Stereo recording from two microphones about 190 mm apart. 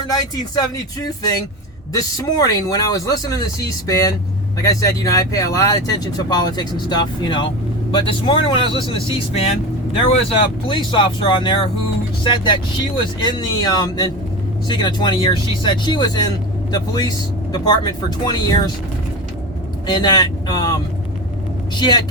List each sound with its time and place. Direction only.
0.1 s speech: 20° left (ahead or behind)
10.7 s speech: 25° left (ahead or behind)
19.9 s speech: 20° left (ahead or behind)
21.8 s speech: 20° left (ahead or behind)